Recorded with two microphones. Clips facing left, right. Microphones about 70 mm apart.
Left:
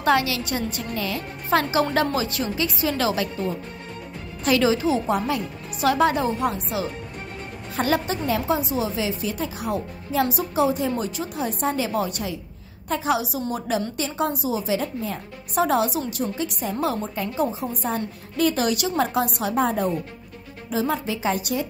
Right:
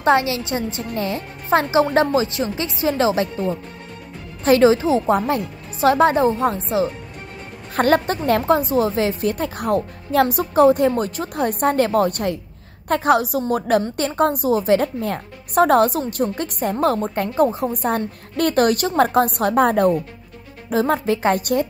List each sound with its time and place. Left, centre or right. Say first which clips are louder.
0.0 s a woman's voice: right 4 dB; right
7.7 s a woman's voice: right 6 dB; right